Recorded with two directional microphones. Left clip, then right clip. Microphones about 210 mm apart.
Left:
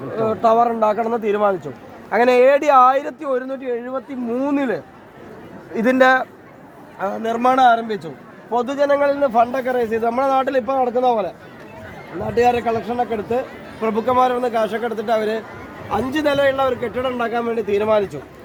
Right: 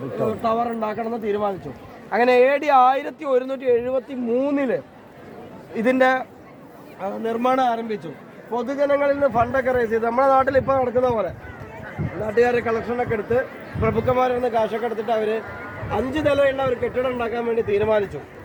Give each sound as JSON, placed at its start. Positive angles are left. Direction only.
{"t": 0.4, "sound": "a man's voice", "side_deg": 45}
{"t": 2.0, "sound": "speech", "side_deg": 30}
{"t": 3.2, "sound": "speech", "side_deg": 5}
{"t": 3.4, "sound": "speech", "side_deg": -20}
{"t": 4.4, "sound": "speech", "side_deg": -5}
{"t": 5.7, "sound": "a man's voice", "side_deg": 25}
{"t": 12.3, "sound": "a man's voice", "side_deg": 45}